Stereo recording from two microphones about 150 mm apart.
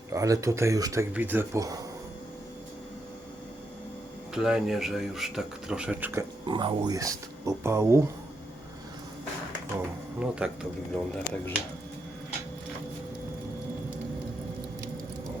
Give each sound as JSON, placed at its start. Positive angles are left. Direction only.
{"t": 0.1, "sound": "speech", "side_deg": -20}
{"t": 4.4, "sound": "speech", "side_deg": -5}
{"t": 6.4, "sound": "speech", "side_deg": -30}
{"t": 10.2, "sound": "speech", "side_deg": -5}